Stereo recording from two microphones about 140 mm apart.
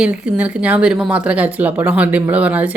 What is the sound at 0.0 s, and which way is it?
A woman's voice, 10° right (ahead or behind).